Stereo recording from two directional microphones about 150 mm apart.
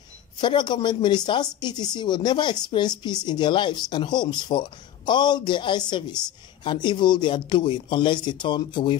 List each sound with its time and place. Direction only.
0.4 s speech: 30° left (ahead or behind)